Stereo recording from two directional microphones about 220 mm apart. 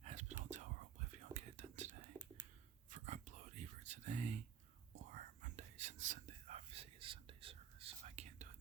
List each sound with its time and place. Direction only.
0.0 s whispering: 30° right (ahead or behind)
2.9 s whispering: 35° right (ahead or behind)